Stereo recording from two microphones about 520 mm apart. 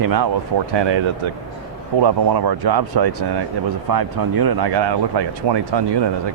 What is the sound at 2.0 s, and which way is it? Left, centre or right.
Speech, right.